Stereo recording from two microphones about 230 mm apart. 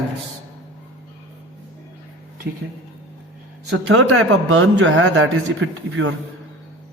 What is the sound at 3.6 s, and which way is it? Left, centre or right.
A man's voice, right.